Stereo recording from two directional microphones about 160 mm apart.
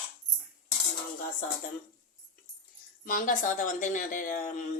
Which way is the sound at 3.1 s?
55° left (ahead or behind).